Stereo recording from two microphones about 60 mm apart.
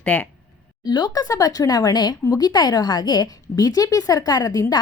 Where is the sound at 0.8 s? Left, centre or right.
Left.